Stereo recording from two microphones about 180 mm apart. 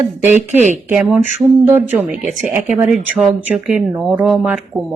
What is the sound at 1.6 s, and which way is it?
Speech, 10° right (ahead or behind).